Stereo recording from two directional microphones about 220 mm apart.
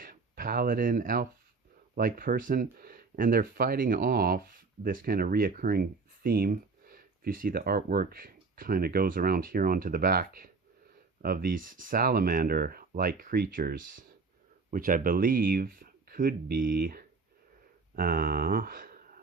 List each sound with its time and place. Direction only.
0.0 s speech: 40° right (ahead or behind)